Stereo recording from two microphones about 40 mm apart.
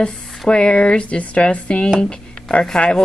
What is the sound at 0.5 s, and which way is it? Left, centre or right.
Speech, left.